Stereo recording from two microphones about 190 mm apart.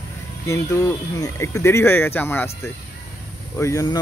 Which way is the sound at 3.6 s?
15° left (ahead or behind).